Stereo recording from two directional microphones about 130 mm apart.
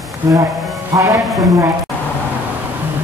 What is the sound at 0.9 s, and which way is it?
Music, 20° right (ahead or behind).